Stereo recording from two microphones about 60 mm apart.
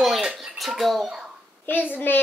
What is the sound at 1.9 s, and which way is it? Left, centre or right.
Speech, left.